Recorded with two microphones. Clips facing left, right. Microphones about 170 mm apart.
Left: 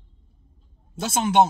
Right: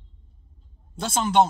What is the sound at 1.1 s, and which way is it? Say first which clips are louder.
Speech: left 1 dB; 55° left (ahead or behind).